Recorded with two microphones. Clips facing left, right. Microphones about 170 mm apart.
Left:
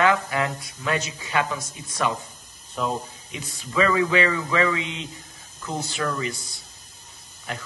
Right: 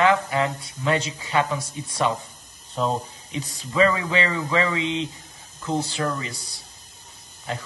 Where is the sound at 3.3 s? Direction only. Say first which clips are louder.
Right 3 dB; 30° right (ahead or behind).